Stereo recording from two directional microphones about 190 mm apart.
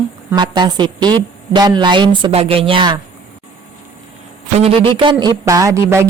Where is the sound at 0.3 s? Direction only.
25° right (ahead or behind).